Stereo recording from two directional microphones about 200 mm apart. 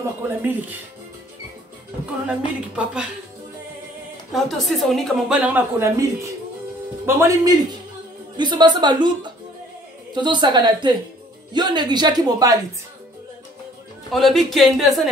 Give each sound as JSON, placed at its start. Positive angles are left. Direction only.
{"t": 0.4, "sound": "a man's voice", "side_deg": -10}
{"t": 2.2, "sound": "speech", "side_deg": -5}
{"t": 4.3, "sound": "speech", "side_deg": 0}
{"t": 7.1, "sound": "a man's voice", "side_deg": -15}
{"t": 14.1, "sound": "speech", "side_deg": 0}